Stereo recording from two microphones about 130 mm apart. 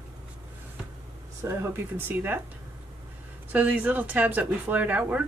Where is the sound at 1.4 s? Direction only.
15° right (ahead or behind).